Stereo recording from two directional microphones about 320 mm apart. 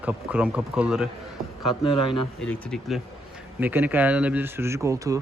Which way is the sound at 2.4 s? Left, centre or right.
Centre.